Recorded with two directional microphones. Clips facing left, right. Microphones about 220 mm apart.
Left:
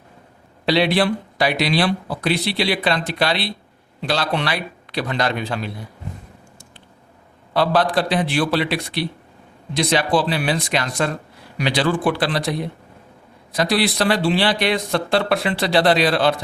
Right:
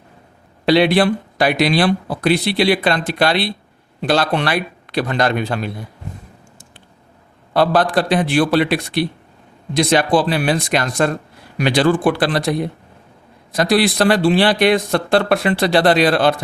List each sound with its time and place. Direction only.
0.6 s speech: 50° right (ahead or behind)
7.5 s speech: 50° right (ahead or behind)